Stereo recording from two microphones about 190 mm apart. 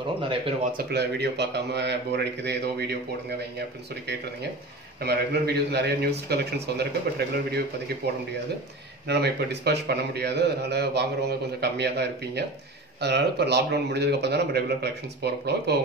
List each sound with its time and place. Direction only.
0.7 s a man's voice: 60° right (ahead or behind)
5.0 s a man's voice: 60° right (ahead or behind)